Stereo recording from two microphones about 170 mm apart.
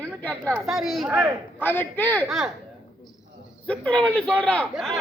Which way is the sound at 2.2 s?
Centre (ahead or behind).